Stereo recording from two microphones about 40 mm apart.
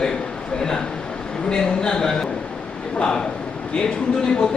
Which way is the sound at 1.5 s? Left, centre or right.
Centre.